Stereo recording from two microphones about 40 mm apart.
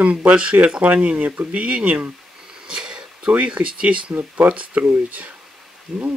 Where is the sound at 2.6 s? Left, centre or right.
Right.